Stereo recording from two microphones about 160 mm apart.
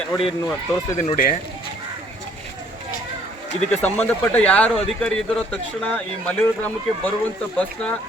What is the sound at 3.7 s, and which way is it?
Speech, 10° left (ahead or behind).